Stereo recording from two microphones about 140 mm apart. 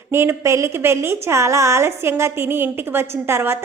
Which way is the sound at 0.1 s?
20° right (ahead or behind).